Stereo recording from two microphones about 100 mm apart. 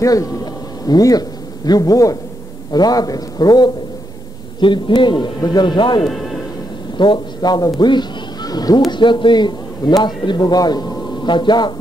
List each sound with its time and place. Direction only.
0.0 s a man's voice: 35° left (ahead or behind)
4.6 s a man's voice: 55° left (ahead or behind)
6.0 s music: centre (ahead or behind)
7.0 s speech: 50° left (ahead or behind)
8.9 s a man's voice: 50° left (ahead or behind)